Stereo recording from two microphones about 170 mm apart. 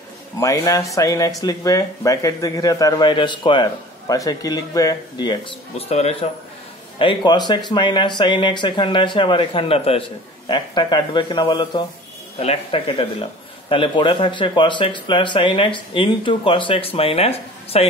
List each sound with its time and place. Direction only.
0.4 s speech: 20° left (ahead or behind); by 17.8 s 35° left (ahead or behind)